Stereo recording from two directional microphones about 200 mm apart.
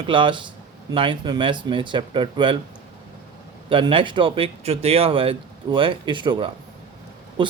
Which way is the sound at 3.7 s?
25° right (ahead or behind).